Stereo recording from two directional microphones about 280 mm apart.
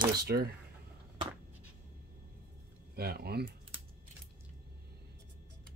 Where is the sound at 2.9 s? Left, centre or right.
Right.